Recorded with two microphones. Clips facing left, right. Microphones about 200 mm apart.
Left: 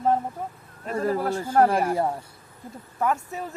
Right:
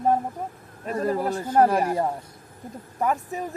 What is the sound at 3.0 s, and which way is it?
Speech, 15° right (ahead or behind).